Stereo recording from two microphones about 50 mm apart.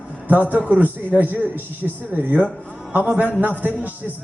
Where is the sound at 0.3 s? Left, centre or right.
Right.